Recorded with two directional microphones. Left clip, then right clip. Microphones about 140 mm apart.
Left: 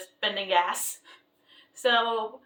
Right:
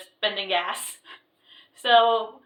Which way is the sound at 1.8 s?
30° left (ahead or behind).